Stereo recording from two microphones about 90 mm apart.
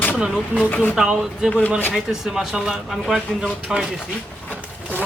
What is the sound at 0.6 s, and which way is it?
Speech, 15° left (ahead or behind).